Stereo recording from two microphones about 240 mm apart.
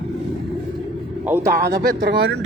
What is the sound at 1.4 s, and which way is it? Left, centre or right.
Speech, right.